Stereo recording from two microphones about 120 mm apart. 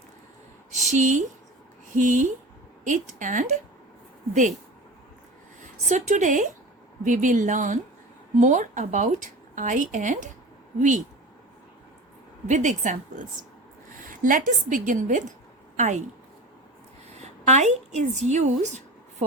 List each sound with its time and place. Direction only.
0.7 s speech: 85° right
5.9 s speech: 90° right
12.5 s speech: 90° right
17.2 s a woman's voice: 75° right (ahead or behind)